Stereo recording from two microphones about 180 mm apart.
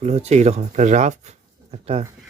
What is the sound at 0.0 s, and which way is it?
Speech, 40° right (ahead or behind).